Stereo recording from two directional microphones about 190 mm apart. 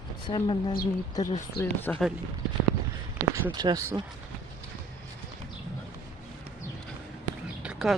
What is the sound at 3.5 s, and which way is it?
Speech, 20° right (ahead or behind).